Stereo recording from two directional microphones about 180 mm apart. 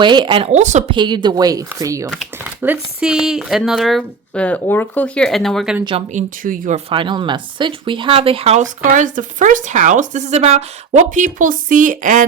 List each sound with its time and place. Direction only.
0.0 s speech: 25° right (ahead or behind); by 0.9 s 40° right (ahead or behind)
0.9 s speech: 25° right (ahead or behind); by 5.7 s centre (ahead or behind)
6.1 s speech: 50° right (ahead or behind)
6.9 s speech: 25° right (ahead or behind)
8.8 s speech: 45° right (ahead or behind)